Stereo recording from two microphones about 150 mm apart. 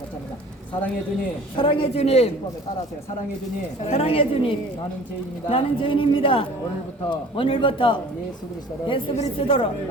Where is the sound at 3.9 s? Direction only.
40° left (ahead or behind).